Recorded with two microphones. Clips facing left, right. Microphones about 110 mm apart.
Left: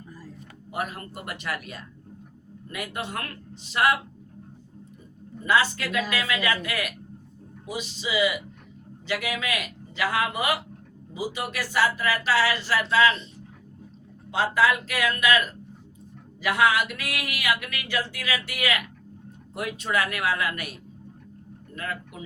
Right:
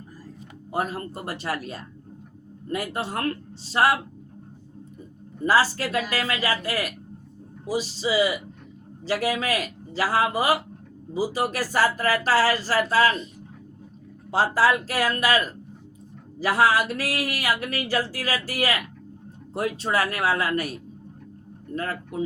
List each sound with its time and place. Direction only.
0.7 s speech: 30° right (ahead or behind)
5.5 s speech: 35° right (ahead or behind)
14.3 s speech: 35° right (ahead or behind)
21.8 s speech: 30° right (ahead or behind)